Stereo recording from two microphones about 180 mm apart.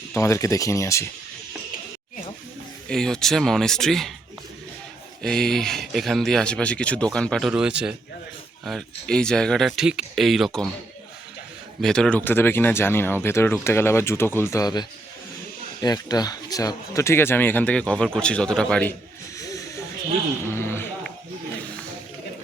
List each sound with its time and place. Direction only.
0.1 s speech: 15° left (ahead or behind)
2.9 s speech: centre (ahead or behind)
5.2 s speech: centre (ahead or behind)
11.8 s speech: 5° left (ahead or behind)
19.4 s snake: 20° left (ahead or behind)
20.5 s a sound: 15° left (ahead or behind)